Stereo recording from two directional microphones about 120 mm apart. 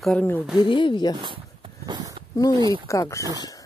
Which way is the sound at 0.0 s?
10° left (ahead or behind).